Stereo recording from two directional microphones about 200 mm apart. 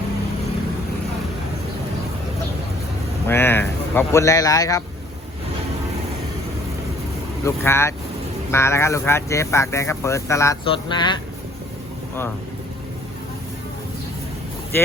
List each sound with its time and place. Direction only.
3.2 s speech: 10° left (ahead or behind)
7.4 s speech: 15° left (ahead or behind)